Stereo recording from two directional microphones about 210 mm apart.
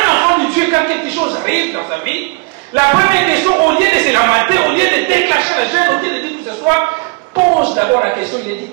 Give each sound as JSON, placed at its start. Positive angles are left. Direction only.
{"t": 0.0, "sound": "a sound", "side_deg": -10}
{"t": 1.4, "sound": "a man's voice", "side_deg": -10}
{"t": 7.5, "sound": "a man's voice", "side_deg": -20}